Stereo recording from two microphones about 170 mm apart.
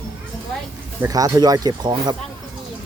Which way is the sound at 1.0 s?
20° right (ahead or behind).